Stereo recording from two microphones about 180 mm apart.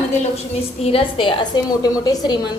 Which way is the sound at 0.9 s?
30° left (ahead or behind).